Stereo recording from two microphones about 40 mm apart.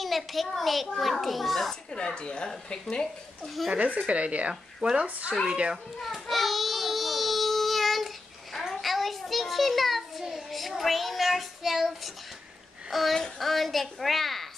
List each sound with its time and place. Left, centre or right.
0.0 s a child's voice: centre
1.9 s a woman's voice: centre
3.4 s a child's voice: centre
3.7 s a child's voice: right
6.0 s child singing: centre
12.9 s a child's voice: centre